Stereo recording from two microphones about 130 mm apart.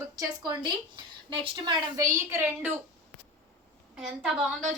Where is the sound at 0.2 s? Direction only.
35° right (ahead or behind); by 2.7 s 15° right (ahead or behind).